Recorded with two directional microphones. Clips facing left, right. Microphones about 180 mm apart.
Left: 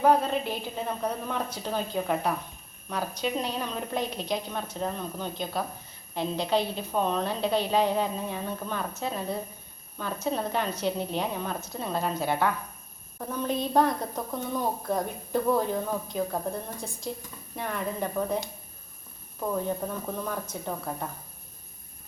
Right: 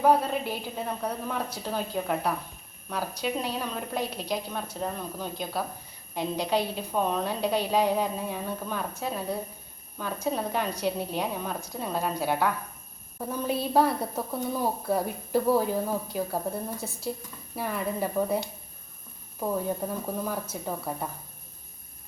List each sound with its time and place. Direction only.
0.0 s a woman's voice: 5° right (ahead or behind)
19.4 s a woman's voice: 10° right (ahead or behind)